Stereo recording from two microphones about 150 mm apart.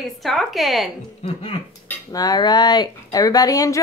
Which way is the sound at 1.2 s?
40° left (ahead or behind).